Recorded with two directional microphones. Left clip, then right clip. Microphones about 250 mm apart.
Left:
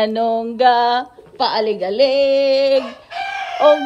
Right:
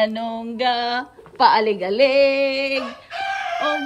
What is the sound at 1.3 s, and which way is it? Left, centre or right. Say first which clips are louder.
Speech: right 3 dB; centre.